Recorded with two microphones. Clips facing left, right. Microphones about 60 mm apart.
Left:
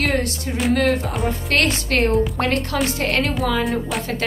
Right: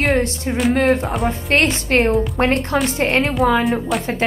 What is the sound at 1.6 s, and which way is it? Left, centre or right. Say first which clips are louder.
A woman's voice: right 3 dB; right.